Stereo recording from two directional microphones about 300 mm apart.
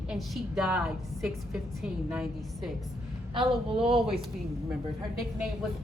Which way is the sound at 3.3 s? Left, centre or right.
Centre.